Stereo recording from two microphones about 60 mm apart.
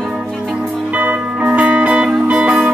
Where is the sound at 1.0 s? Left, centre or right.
Right.